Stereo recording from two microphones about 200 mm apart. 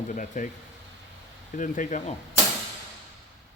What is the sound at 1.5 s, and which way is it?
Speech, 40° left (ahead or behind).